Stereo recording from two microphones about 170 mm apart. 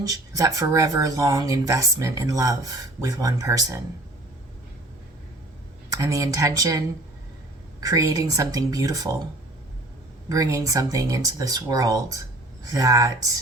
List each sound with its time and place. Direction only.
0.1 s speech: 20° right (ahead or behind)
5.9 s speech: 20° right (ahead or behind)
10.2 s speech: 20° right (ahead or behind)